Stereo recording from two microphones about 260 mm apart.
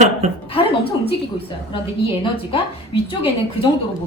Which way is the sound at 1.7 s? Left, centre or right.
Left.